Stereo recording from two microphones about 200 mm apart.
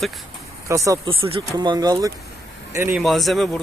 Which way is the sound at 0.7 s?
15° right (ahead or behind).